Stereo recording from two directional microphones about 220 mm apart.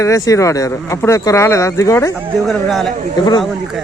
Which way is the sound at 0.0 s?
15° left (ahead or behind).